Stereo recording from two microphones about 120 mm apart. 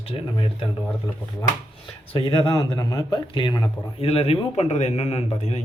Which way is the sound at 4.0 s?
55° left (ahead or behind).